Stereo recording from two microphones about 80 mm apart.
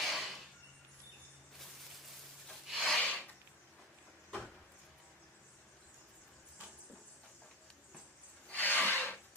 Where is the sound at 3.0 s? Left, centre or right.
Centre.